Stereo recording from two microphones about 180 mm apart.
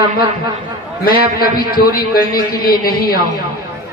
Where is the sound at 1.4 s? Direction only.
55° left (ahead or behind).